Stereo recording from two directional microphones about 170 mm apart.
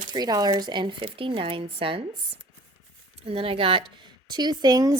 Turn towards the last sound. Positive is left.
turn(degrees=-20)  # may be behind; listen again after turning